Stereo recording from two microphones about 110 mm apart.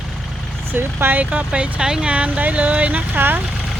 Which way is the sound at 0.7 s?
15° right (ahead or behind).